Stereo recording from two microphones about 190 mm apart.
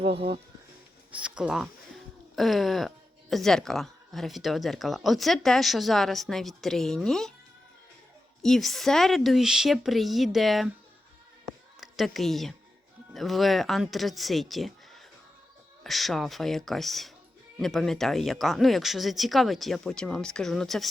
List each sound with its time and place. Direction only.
0.0 s speech: 30° right (ahead or behind)
1.1 s speech: 5° right (ahead or behind)
8.4 s speech: centre (ahead or behind)
11.8 s speech: centre (ahead or behind)